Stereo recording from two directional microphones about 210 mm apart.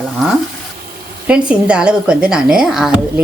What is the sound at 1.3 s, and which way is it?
Speech, 5° right (ahead or behind).